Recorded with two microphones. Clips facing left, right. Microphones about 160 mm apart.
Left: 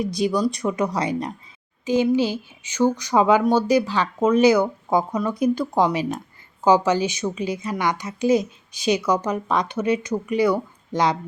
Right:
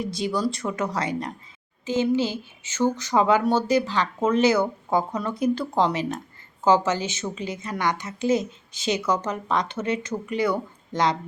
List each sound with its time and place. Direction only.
0.3 s a woman's voice: 15° left (ahead or behind)